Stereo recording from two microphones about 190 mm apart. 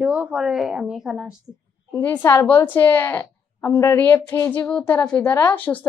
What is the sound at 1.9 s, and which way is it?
A woman's voice, 10° left (ahead or behind).